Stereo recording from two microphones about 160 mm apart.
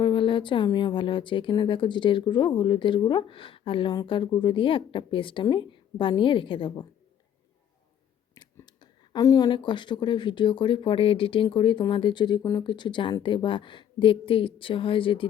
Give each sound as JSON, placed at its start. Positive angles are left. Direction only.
{"t": 0.0, "sound": "speech", "side_deg": 30}
{"t": 8.4, "sound": "speech", "side_deg": 25}